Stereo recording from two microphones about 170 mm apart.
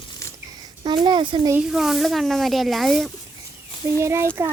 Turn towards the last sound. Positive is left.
turn(degrees=-15)  # may be behind; listen again after turning